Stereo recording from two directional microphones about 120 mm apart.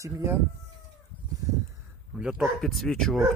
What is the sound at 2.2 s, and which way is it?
Speech, 5° right (ahead or behind).